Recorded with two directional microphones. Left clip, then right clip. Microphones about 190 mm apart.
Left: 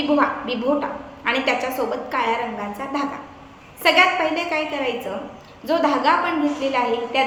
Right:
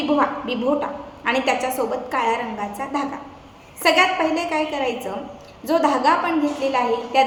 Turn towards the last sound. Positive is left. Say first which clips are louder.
# right 2 dB
turn(degrees=-15)  # may be behind; listen again after turning